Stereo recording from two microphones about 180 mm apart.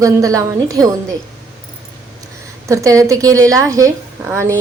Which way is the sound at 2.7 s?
20° right (ahead or behind).